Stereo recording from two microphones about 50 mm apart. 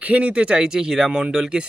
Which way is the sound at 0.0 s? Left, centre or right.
Right.